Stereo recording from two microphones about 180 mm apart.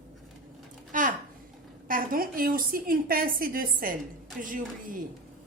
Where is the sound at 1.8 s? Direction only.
50° right (ahead or behind).